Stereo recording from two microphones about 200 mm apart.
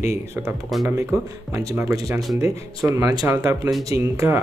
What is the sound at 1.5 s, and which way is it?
Speech, 15° right (ahead or behind).